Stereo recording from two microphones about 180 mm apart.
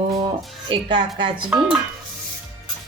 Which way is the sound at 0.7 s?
25° right (ahead or behind).